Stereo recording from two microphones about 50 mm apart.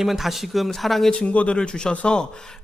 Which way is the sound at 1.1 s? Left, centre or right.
Centre.